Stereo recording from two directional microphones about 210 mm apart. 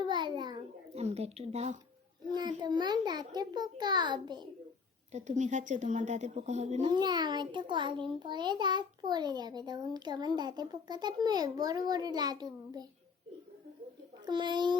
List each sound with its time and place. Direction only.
0.0 s babbling: 20° right (ahead or behind)
2.3 s a child's voice: 20° right (ahead or behind)
5.1 s a woman's voice: 35° right (ahead or behind)
6.9 s a child's voice: 20° right (ahead or behind)
14.3 s a child's voice: 20° right (ahead or behind)